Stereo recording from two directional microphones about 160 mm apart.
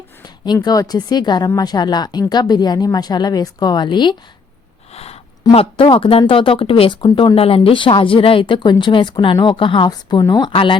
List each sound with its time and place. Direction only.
0.4 s speech: 25° left (ahead or behind)
5.4 s a woman's voice: 30° left (ahead or behind)